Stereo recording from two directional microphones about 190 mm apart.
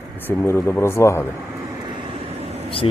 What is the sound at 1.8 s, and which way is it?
Vehicle, 25° right (ahead or behind).